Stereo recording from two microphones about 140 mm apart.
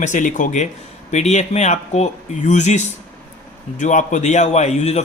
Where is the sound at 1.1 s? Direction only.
55° left (ahead or behind).